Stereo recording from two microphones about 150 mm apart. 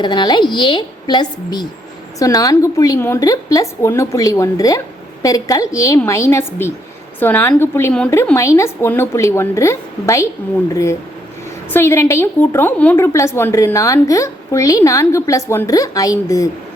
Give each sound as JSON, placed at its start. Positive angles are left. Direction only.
{"t": 0.0, "sound": "a woman's voice", "side_deg": 30}
{"t": 11.7, "sound": "a woman's voice", "side_deg": 15}